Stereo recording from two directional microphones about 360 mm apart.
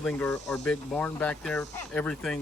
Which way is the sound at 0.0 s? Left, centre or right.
Centre.